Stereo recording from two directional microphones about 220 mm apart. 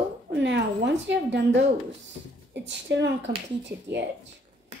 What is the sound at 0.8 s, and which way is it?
Speech, 50° right (ahead or behind).